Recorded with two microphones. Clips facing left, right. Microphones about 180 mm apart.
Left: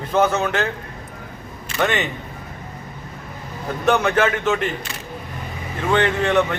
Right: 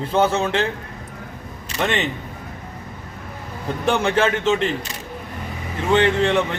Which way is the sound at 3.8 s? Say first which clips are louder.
Left 1 dB; 30° right (ahead or behind).